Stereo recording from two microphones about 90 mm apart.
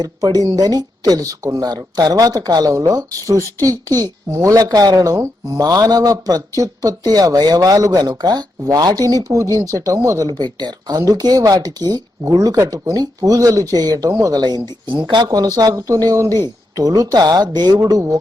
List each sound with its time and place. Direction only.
0.0 s speech: 40° right (ahead or behind)
10.2 s speech: 50° right (ahead or behind)